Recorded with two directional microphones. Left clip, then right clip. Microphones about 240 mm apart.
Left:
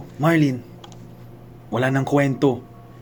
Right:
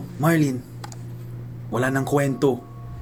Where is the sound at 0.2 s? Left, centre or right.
Left.